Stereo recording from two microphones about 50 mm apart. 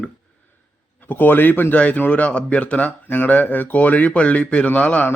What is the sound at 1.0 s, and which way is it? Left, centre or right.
A man's voice, left.